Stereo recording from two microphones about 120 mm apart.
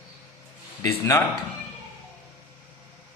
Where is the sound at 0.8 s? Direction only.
25° left (ahead or behind).